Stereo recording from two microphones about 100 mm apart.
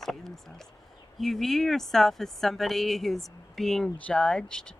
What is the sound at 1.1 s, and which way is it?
Speech, centre (ahead or behind).